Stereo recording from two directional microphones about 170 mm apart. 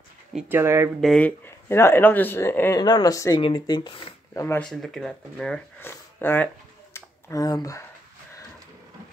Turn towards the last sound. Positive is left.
turn(degrees=20)  # may be behind; listen again after turning